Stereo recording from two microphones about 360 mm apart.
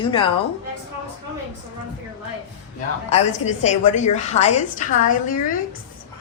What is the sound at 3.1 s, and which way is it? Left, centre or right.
A woman's voice, centre.